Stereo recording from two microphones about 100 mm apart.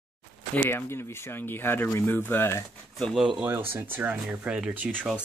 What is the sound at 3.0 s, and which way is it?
Speech, centre (ahead or behind).